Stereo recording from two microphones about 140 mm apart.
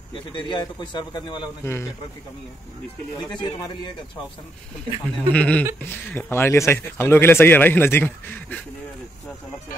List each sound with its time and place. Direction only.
0.3 s a man's voice: 35° left (ahead or behind)
1.6 s a man's voice: 20° left (ahead or behind)
3.3 s a man's voice: 30° left (ahead or behind)
5.0 s speech: 10° left (ahead or behind)